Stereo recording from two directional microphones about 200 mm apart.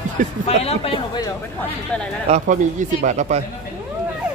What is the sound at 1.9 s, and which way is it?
Speech, 5° left (ahead or behind).